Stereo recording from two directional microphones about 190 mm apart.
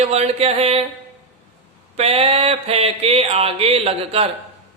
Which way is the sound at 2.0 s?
30° right (ahead or behind).